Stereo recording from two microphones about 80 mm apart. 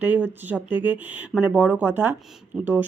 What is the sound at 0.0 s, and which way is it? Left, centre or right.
Speech, right.